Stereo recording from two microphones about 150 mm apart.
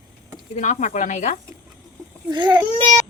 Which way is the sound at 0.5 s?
55° left (ahead or behind).